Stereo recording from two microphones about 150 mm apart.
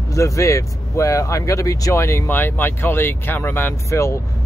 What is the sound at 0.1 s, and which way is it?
Speech, 20° left (ahead or behind).